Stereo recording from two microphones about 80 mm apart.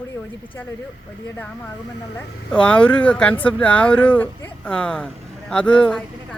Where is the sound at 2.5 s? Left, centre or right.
Centre.